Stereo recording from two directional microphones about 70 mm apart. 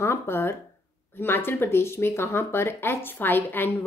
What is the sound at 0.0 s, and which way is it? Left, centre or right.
A woman's voice, left.